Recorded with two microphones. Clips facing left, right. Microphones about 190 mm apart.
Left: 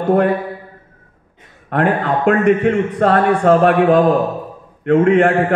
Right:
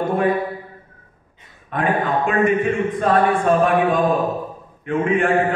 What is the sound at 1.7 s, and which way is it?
A man's voice, 70° left (ahead or behind).